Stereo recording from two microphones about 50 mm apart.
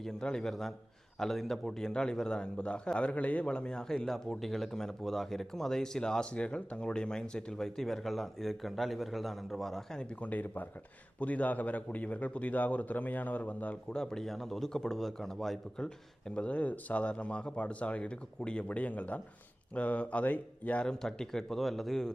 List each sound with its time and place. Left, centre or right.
0.0 s speech: centre
10.2 s a man's voice: left
13.9 s speech: centre; by 20.8 s left
20.8 s speech: centre